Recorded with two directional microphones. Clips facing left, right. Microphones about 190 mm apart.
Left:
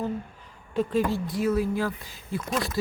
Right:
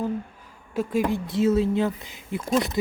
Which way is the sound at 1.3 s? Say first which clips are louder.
Right 4 dB; 25° right (ahead or behind).